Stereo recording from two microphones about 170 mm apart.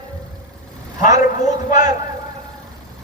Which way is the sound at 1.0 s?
45° left (ahead or behind).